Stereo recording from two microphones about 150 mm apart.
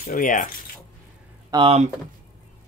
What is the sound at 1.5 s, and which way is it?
Speech, 40° right (ahead or behind).